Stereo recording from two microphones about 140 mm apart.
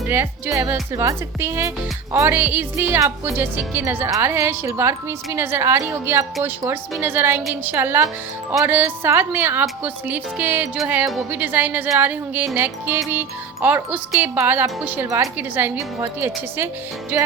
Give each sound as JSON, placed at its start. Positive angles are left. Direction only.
{"t": 0.1, "sound": "a woman's voice", "side_deg": -15}
{"t": 15.0, "sound": "a woman's voice", "side_deg": -25}